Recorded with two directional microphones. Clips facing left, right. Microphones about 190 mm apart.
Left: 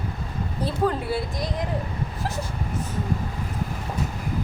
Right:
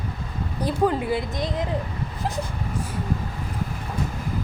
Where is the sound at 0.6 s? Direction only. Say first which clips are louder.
Right 2 dB; 15° right (ahead or behind).